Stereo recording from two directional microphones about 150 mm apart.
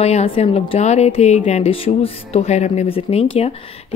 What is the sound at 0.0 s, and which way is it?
A woman's voice, 45° left (ahead or behind).